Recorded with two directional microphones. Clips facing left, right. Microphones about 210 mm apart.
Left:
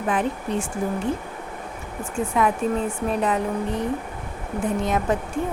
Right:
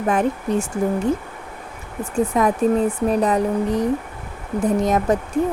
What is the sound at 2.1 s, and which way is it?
Speech, 40° right (ahead or behind).